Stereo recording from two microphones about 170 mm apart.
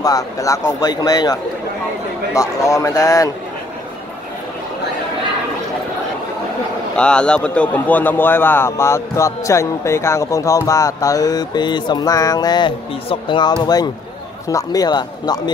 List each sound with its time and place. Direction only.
0.0 s speech: 20° left (ahead or behind)
7.0 s a man's voice: 5° left (ahead or behind); by 15.5 s 25° left (ahead or behind)